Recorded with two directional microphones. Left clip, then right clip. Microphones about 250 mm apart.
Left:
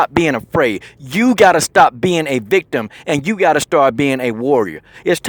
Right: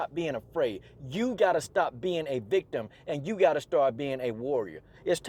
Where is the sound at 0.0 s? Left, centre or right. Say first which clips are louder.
Left 17 dB; left.